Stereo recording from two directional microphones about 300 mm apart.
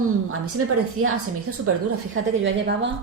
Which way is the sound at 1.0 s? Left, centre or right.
Right.